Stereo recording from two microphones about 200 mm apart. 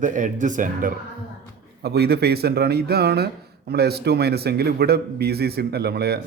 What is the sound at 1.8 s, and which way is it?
A man's voice, 55° right (ahead or behind).